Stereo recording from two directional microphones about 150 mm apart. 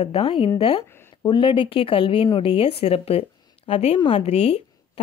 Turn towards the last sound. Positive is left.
turn(degrees=45)  # may be behind; listen again after turning